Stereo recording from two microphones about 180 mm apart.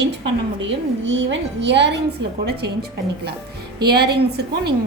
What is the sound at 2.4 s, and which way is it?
A woman's voice, 60° right (ahead or behind).